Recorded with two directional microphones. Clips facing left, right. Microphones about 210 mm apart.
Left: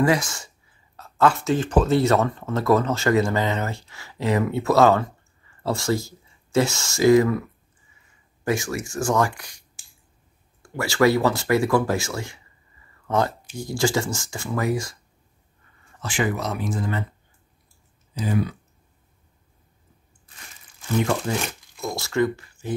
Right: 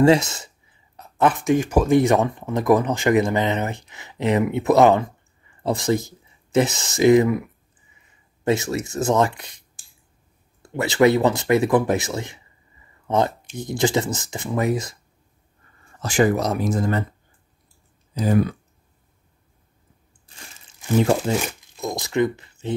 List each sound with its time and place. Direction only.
0.0 s speech: 25° right (ahead or behind)
8.5 s speech: 25° right (ahead or behind)
10.6 s speech: 20° right (ahead or behind)
13.0 s a sound: 20° right (ahead or behind)
13.6 s speech: 20° right (ahead or behind)
16.0 s speech: 40° right (ahead or behind)
18.2 s speech: 45° right (ahead or behind)
20.6 s speech: 25° right (ahead or behind)